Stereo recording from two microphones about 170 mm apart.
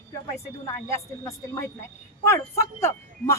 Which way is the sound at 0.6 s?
15° left (ahead or behind).